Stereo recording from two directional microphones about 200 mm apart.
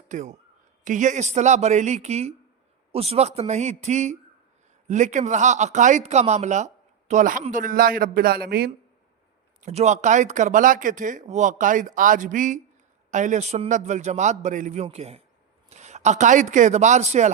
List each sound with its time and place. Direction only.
0.1 s a man's voice: 40° right (ahead or behind)
9.6 s a man's voice: 35° right (ahead or behind)